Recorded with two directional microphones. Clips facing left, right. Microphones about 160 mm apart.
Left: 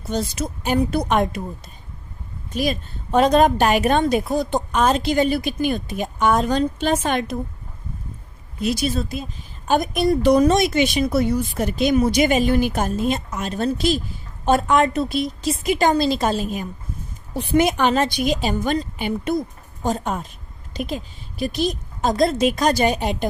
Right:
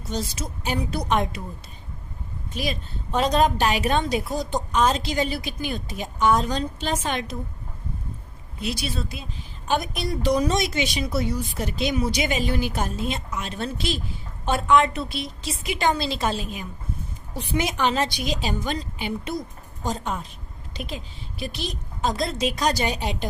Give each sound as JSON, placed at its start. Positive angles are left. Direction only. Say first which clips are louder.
{"t": 0.1, "sound": "a woman's voice", "louder": "left 6 dB", "side_deg": 55}
{"t": 2.6, "sound": "a woman's voice", "louder": "left 6 dB", "side_deg": 50}
{"t": 8.6, "sound": "a woman's voice", "louder": "left 7 dB", "side_deg": 45}